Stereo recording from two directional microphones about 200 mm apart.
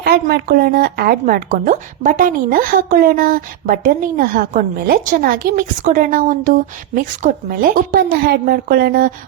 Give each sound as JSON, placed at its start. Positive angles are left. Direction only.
{"t": 0.0, "sound": "speech", "side_deg": -50}